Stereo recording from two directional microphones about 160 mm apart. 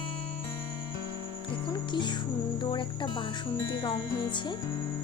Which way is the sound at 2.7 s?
30° left (ahead or behind).